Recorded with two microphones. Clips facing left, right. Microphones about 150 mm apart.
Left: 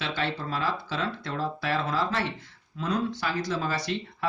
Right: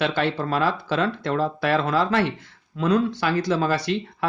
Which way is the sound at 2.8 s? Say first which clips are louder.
Right 8 dB; 80° right.